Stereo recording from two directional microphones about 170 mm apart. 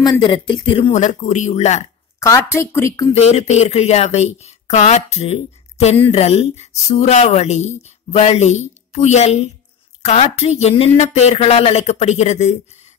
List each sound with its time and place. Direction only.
0.0 s speech: 30° left (ahead or behind)
0.9 s speech: 45° left (ahead or behind)
2.1 s speech: 15° left (ahead or behind)
3.1 s speech: 35° left (ahead or behind)